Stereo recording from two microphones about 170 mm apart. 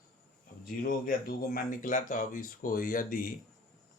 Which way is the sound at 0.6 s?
55° left (ahead or behind).